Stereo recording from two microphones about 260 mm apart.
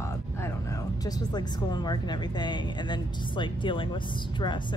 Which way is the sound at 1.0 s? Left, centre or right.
Centre.